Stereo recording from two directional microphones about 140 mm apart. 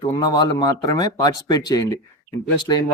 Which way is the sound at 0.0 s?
30° left (ahead or behind).